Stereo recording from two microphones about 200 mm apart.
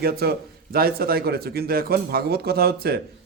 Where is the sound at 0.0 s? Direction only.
50° right (ahead or behind).